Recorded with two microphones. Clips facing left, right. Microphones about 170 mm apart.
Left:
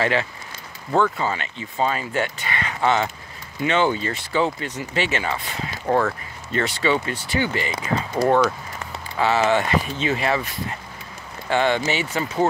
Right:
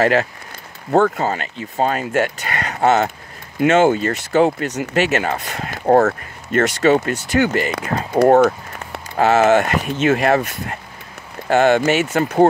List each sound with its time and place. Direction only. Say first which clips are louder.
0.0 s speech: right 6 dB; 45° right (ahead or behind)
8.3 s speech: right 6 dB; 45° right (ahead or behind)